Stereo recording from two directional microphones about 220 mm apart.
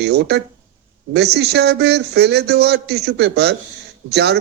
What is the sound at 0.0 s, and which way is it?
Speech, 50° right (ahead or behind).